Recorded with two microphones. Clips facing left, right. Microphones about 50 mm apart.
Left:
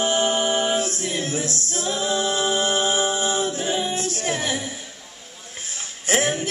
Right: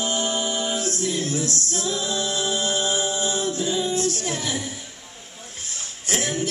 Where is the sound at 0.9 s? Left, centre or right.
Left.